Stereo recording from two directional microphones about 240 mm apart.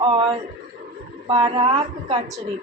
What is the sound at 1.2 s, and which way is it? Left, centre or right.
Speech, right.